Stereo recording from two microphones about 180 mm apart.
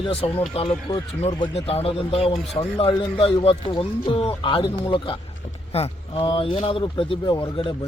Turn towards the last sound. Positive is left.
turn(degrees=30)  # may be behind; listen again after turning